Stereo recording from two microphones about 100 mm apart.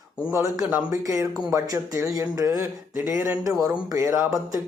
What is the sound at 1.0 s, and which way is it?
A man's voice, 30° right (ahead or behind).